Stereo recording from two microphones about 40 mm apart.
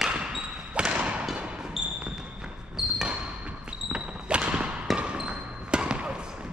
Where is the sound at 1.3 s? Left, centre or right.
Right.